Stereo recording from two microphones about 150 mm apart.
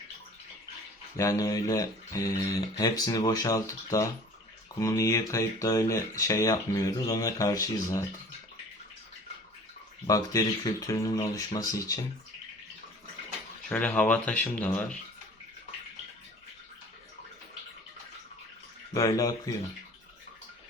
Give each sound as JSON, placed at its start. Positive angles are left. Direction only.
{"t": 1.1, "sound": "speech", "side_deg": 20}
{"t": 10.1, "sound": "speech", "side_deg": 25}
{"t": 13.7, "sound": "speech", "side_deg": 5}
{"t": 18.9, "sound": "speech", "side_deg": 20}